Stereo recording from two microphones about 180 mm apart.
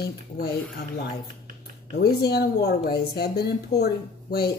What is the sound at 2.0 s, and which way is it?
Speech, 65° left (ahead or behind).